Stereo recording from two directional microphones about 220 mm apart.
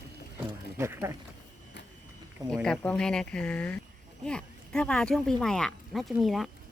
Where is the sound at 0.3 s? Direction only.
10° right (ahead or behind).